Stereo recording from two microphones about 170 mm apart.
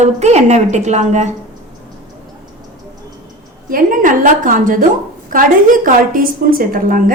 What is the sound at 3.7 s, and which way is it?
A woman's voice, 50° right (ahead or behind).